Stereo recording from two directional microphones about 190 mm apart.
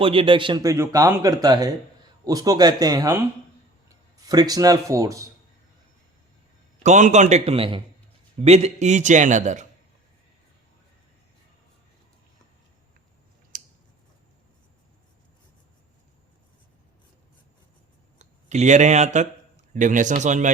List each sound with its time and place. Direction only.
0.0 s speech: 30° right (ahead or behind)
6.8 s a man's voice: 40° right (ahead or behind)
13.5 s scissors: 45° right (ahead or behind)
18.2 s a man's voice: 40° right (ahead or behind)